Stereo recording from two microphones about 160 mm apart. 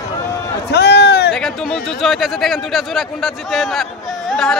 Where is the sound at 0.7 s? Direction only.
90° left.